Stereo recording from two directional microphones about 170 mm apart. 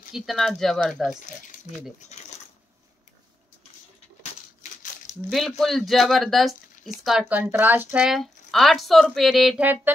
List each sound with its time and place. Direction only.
0.1 s speech: centre (ahead or behind)
1.5 s a sound: 55° left (ahead or behind)
2.1 s speech: 40° left (ahead or behind)
5.3 s speech: centre (ahead or behind)